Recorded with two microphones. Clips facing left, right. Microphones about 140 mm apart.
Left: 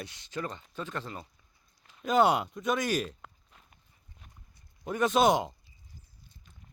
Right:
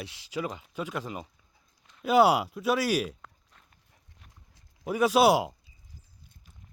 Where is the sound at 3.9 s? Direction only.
80° right.